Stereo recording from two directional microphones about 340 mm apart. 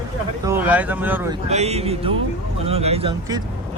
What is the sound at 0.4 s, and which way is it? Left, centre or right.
Speech, centre.